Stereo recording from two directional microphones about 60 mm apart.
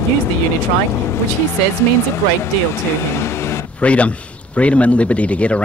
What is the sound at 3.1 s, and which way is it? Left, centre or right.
Vehicle, left.